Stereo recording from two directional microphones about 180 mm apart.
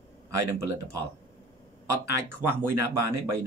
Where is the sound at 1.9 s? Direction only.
15° right (ahead or behind).